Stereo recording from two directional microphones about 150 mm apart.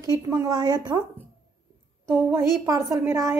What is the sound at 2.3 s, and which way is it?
A woman's voice, 20° right (ahead or behind).